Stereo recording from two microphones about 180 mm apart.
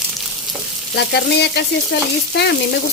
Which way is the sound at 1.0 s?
70° left (ahead or behind).